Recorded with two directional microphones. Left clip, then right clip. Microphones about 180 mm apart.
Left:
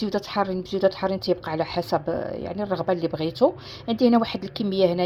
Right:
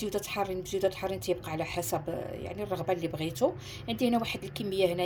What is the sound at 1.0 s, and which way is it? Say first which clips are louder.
Speech: left 8 dB; 50° left (ahead or behind).